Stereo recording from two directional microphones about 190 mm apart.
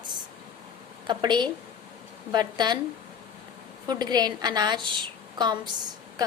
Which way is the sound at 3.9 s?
20° right (ahead or behind).